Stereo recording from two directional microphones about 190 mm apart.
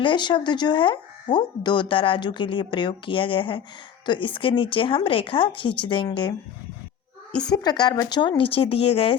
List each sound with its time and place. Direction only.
0.0 s speech: 25° left (ahead or behind)
7.5 s speech: 20° left (ahead or behind)